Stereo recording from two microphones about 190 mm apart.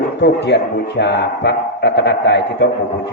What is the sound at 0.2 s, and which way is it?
Speech, 65° left (ahead or behind).